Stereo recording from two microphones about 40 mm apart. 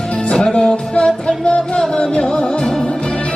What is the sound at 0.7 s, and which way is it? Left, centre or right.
Music, left.